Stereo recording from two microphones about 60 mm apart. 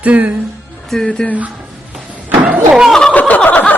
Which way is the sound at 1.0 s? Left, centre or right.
Centre.